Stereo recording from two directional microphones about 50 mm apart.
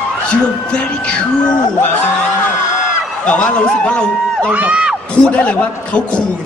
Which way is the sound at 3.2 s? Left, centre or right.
Left.